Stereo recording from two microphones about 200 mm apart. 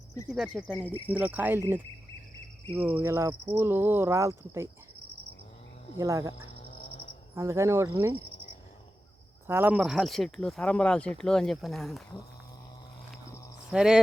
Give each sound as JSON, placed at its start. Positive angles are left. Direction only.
{"t": 0.3, "sound": "speech", "side_deg": 0}
{"t": 6.0, "sound": "speech", "side_deg": -15}
{"t": 7.3, "sound": "speech", "side_deg": -15}
{"t": 9.5, "sound": "speech", "side_deg": -10}
{"t": 13.7, "sound": "speech", "side_deg": -5}